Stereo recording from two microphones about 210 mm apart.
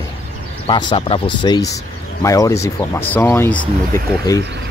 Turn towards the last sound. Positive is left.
turn(degrees=5)  # may be behind; listen again after turning